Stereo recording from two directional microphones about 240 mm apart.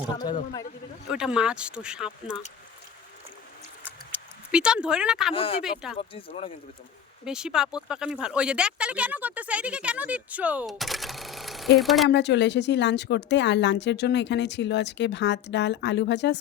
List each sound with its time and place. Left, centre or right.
1.1 s speech: centre
4.5 s speech: centre
5.3 s speech: left
5.6 s speech: centre
6.0 s speech: left
7.3 s speech: centre
12.0 s speech: left